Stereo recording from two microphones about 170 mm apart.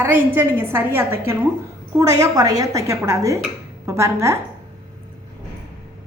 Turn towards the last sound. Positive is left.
turn(degrees=-15)  # may be behind; listen again after turning